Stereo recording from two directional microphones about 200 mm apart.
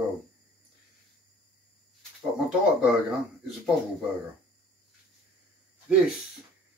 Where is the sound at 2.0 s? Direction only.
5° right (ahead or behind).